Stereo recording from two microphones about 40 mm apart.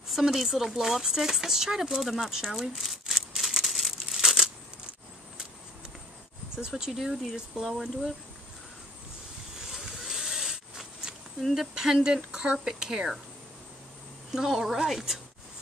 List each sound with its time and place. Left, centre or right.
0.1 s speech: centre
3.6 s crumpling: centre
6.5 s speech: centre
7.6 s speech: centre
9.6 s vehicle: centre
11.7 s speech: centre
14.3 s speech: centre